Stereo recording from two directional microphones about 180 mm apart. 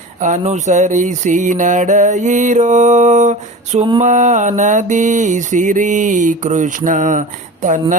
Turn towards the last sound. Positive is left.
turn(degrees=-45)  # may be behind; listen again after turning